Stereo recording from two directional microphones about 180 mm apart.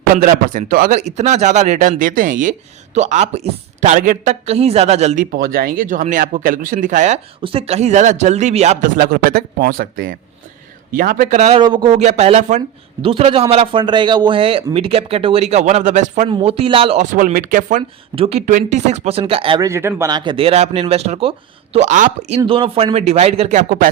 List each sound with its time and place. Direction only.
0.2 s speech: 50° right (ahead or behind)
0.9 s speech: 40° right (ahead or behind)
7.4 s speech: 30° right (ahead or behind)
9.0 s speech: 55° right (ahead or behind)
16.3 s speech: 35° right (ahead or behind)
17.0 s speech: 45° right (ahead or behind); by 19.6 s 30° right (ahead or behind)
19.6 s speech: 15° right (ahead or behind); by 22.4 s 45° right (ahead or behind)
22.4 s speech: 30° right (ahead or behind); by 23.9 s 45° right (ahead or behind)